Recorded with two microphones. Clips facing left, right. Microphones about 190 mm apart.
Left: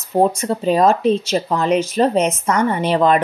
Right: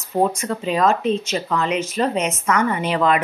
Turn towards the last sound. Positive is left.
turn(degrees=35)  # may be behind; listen again after turning